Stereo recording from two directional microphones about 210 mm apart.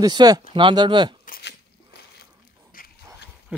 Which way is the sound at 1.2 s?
45° left (ahead or behind).